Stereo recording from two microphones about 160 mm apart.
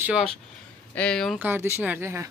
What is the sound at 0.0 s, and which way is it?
Speech, 5° right (ahead or behind).